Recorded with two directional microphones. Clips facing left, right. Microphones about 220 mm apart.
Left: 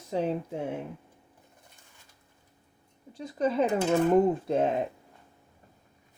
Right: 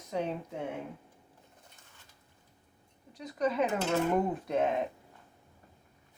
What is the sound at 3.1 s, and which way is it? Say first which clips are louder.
Speech: left 3 dB; 30° left (ahead or behind).